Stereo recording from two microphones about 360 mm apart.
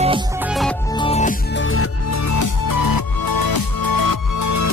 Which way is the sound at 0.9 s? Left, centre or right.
Centre.